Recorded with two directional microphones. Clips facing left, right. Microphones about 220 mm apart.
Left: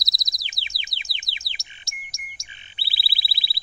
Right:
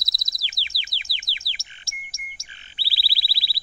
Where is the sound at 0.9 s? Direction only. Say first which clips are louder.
Even; 20° left (ahead or behind).